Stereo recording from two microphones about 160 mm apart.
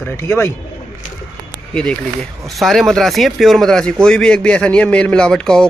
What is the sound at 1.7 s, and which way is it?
Speech, 5° left (ahead or behind).